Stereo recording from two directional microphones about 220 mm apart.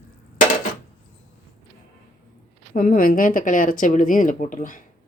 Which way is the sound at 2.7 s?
40° left (ahead or behind).